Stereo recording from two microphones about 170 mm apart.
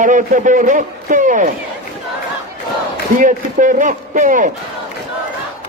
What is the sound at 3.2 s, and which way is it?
A man's voice, 50° right (ahead or behind).